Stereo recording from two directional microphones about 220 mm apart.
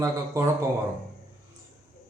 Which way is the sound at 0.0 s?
15° right (ahead or behind).